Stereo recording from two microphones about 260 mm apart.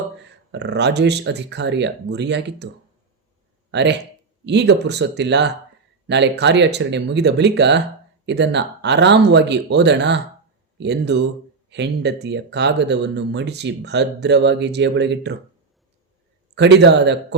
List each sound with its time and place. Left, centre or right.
0.5 s speech: right
3.7 s speech: right
16.6 s speech: right